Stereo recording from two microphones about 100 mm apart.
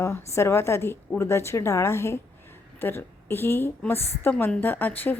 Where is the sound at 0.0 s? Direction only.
25° left (ahead or behind).